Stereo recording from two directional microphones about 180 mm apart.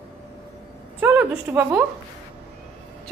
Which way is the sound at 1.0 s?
10° right (ahead or behind).